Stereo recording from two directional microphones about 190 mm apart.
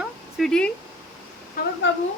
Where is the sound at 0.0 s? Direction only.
Centre (ahead or behind).